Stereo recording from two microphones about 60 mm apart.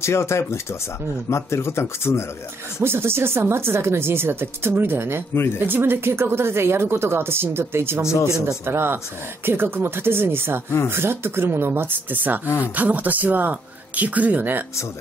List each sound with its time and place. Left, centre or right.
0.0 s speech: left
2.8 s speech: right
5.3 s speech: left
5.7 s speech: right
12.4 s speech: left
12.7 s speech: right